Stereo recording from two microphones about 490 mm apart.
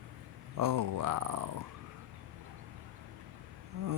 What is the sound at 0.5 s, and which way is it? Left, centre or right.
Speech, right.